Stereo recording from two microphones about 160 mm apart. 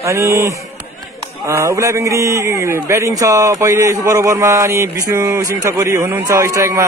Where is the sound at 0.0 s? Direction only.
20° right (ahead or behind).